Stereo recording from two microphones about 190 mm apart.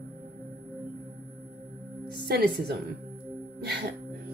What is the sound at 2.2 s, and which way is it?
Speech, 55° right (ahead or behind).